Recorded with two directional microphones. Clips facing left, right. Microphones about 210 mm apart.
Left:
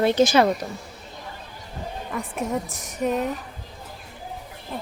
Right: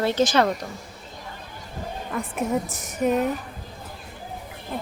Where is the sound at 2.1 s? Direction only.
Centre (ahead or behind).